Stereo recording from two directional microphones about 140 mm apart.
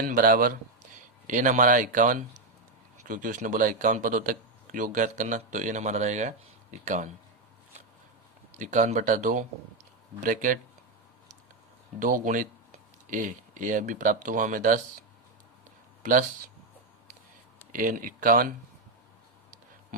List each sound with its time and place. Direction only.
0.0 s speech: 75° right (ahead or behind); by 7.1 s 60° right (ahead or behind)
8.5 s speech: 60° right (ahead or behind)
11.9 s speech: 70° right (ahead or behind)
17.7 s speech: 75° right (ahead or behind)